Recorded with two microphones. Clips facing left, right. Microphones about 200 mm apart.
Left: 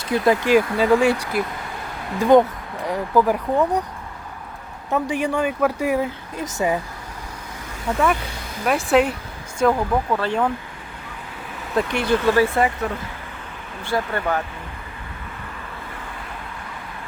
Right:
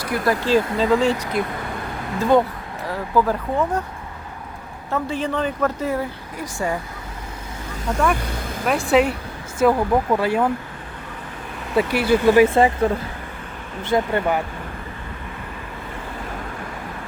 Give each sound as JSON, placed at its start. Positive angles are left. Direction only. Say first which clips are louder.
{"t": 0.0, "sound": "speech", "louder": "left 3 dB", "side_deg": 20}
{"t": 2.8, "sound": "speech", "louder": "left 2 dB", "side_deg": 15}
{"t": 4.9, "sound": "speech", "louder": "left 2 dB", "side_deg": 15}
{"t": 7.9, "sound": "speech", "louder": "even", "side_deg": 0}
{"t": 11.8, "sound": "speech", "louder": "right 3 dB", "side_deg": -5}
{"t": 12.5, "sound": "speech", "louder": "right 4 dB", "side_deg": -25}